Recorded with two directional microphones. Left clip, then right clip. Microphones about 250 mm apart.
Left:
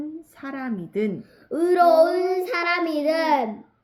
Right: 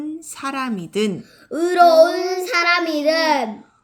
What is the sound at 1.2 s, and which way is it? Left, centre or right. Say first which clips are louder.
Child singing: right 2 dB; centre.